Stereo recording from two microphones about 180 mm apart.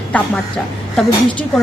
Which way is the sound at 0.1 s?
5° left (ahead or behind).